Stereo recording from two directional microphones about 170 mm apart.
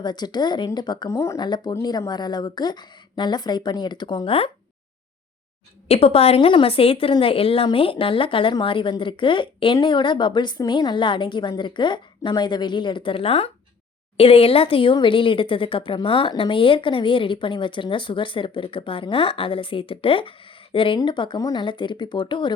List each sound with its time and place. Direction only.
0.0 s a woman's voice: 25° left (ahead or behind)
5.9 s a woman's voice: 35° left (ahead or behind)